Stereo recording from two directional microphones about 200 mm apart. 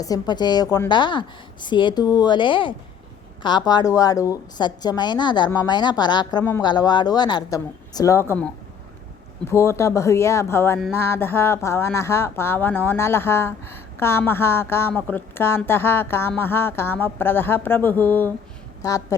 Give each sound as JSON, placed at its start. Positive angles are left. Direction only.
{"t": 0.0, "sound": "a woman's voice", "side_deg": 20}